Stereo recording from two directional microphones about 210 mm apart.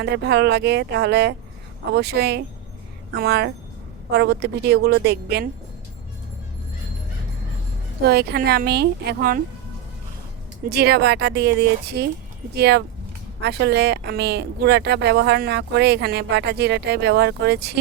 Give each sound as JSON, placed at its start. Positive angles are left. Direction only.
{"t": 0.0, "sound": "speech", "side_deg": -50}
{"t": 8.0, "sound": "speech", "side_deg": -50}
{"t": 10.7, "sound": "speech", "side_deg": -50}